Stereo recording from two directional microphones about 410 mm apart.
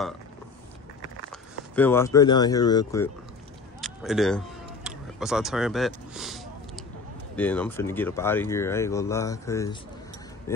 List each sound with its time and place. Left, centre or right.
1.3 s speech: centre
4.8 s a sound: centre
7.3 s speech: centre